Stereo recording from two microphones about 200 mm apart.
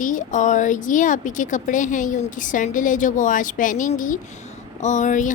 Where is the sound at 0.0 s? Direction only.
40° left (ahead or behind).